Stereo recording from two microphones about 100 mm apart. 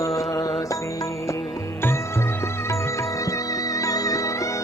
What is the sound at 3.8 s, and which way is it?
Music, 35° left (ahead or behind).